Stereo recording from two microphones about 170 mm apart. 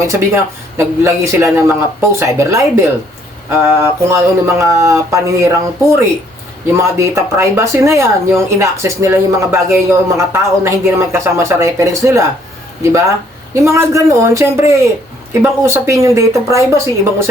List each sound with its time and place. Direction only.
0.8 s speech: 15° right (ahead or behind)